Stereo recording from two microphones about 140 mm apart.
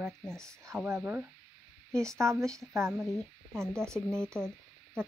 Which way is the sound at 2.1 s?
20° right (ahead or behind).